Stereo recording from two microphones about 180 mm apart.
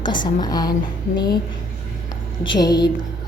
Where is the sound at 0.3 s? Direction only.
20° left (ahead or behind).